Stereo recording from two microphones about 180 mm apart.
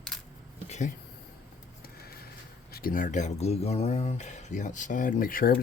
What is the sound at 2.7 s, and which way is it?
Speech, 55° left (ahead or behind).